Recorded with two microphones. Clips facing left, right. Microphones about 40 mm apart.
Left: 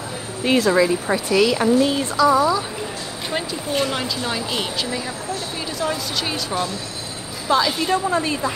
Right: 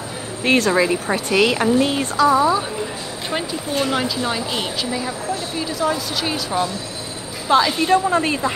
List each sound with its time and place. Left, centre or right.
0.7 s speech: right
2.2 s a woman's voice: right
3.3 s speech: centre
7.4 s a woman's voice: right